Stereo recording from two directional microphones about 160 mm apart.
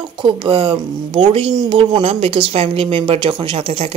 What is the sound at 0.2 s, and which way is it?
A woman's voice, 30° right (ahead or behind).